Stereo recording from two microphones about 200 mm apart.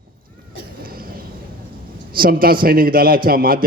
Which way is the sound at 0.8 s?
45° right (ahead or behind).